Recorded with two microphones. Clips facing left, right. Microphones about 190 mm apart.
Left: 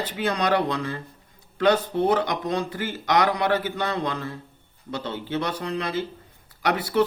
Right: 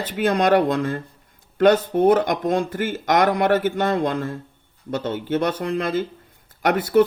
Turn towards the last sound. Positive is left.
turn(degrees=-50)  # may be behind; listen again after turning